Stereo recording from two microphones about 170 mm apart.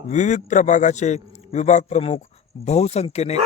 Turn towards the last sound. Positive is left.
turn(degrees=40)  # may be behind; listen again after turning